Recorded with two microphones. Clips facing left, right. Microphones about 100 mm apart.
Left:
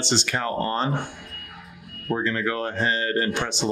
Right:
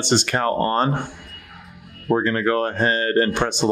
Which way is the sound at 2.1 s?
50° right (ahead or behind).